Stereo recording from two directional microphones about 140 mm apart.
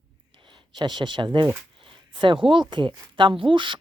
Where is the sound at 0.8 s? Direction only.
35° right (ahead or behind).